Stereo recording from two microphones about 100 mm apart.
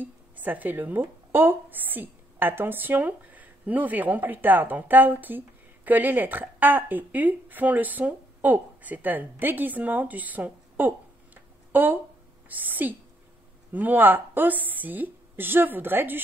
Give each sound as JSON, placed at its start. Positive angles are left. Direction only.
{"t": 0.0, "sound": "a woman's voice", "side_deg": -20}